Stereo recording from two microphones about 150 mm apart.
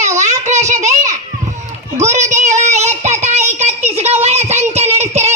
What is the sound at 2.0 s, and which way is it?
Child singing, 50° right (ahead or behind).